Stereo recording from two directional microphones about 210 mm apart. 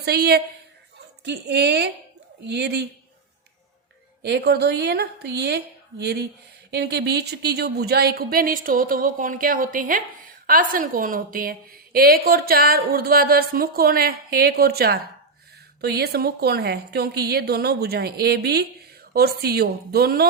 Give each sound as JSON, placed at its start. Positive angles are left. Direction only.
{"t": 0.0, "sound": "a woman's voice", "side_deg": -50}
{"t": 4.2, "sound": "a woman's voice", "side_deg": -55}